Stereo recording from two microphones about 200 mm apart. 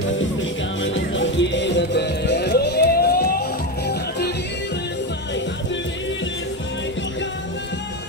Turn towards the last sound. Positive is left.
turn(degrees=65)  # may be behind; listen again after turning